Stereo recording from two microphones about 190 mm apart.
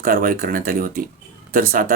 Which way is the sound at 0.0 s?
50° right (ahead or behind).